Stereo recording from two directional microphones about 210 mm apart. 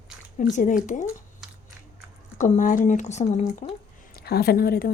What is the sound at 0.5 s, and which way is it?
Speech, 40° left (ahead or behind).